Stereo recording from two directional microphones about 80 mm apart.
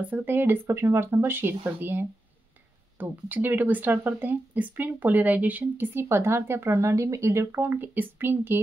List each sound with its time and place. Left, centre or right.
0.0 s speech: right